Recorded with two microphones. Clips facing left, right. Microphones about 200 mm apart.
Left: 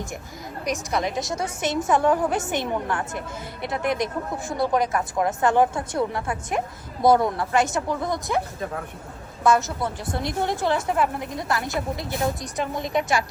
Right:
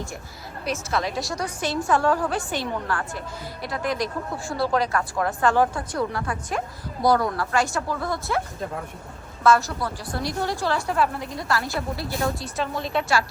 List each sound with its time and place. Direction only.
0.6 s a woman's voice: 15° left (ahead or behind)
9.4 s a woman's voice: 20° left (ahead or behind)